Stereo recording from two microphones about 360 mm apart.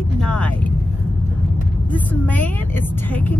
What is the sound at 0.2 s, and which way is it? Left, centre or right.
Vehicle, centre.